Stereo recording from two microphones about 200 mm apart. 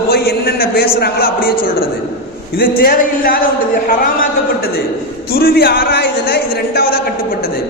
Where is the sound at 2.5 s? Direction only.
50° left (ahead or behind).